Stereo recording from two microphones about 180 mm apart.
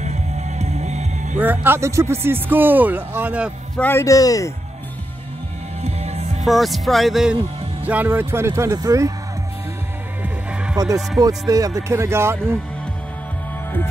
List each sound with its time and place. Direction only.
0.0 s music: 40° right (ahead or behind)
1.4 s speech: 10° right (ahead or behind)
3.7 s a man's voice: 10° left (ahead or behind)
5.8 s music: 35° right (ahead or behind)
6.4 s speech: centre (ahead or behind); by 9.1 s 20° right (ahead or behind)
10.8 s speech: 20° right (ahead or behind)